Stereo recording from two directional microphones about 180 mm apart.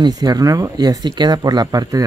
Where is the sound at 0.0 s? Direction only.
20° right (ahead or behind).